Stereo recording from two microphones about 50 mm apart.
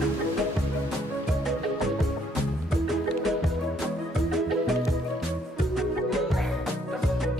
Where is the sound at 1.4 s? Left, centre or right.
Centre.